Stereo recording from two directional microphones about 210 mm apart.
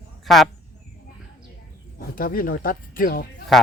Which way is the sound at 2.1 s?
45° left (ahead or behind).